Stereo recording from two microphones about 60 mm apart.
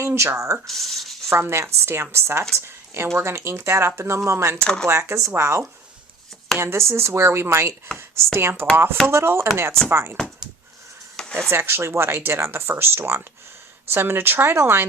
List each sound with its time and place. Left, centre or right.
0.0 s speech: right
0.7 s speech: centre
1.3 s speech: right
4.6 s speech: centre
4.9 s speech: right
11.2 s a sound: centre
11.5 s speech: right